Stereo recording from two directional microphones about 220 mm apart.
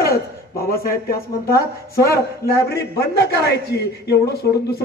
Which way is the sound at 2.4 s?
10° left (ahead or behind).